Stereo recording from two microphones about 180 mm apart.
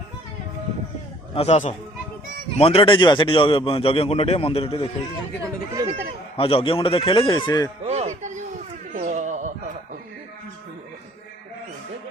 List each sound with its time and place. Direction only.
1.3 s a man's voice: 35° left (ahead or behind)
5.7 s speech: 30° right (ahead or behind)
6.3 s speech: 30° left (ahead or behind)
7.9 s music: 40° right (ahead or behind)
8.9 s a sound: 45° right (ahead or behind)